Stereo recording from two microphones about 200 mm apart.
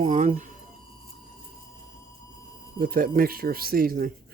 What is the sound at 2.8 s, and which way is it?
Speech, 45° right (ahead or behind).